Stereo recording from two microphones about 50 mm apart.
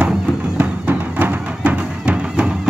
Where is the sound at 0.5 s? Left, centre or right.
Right.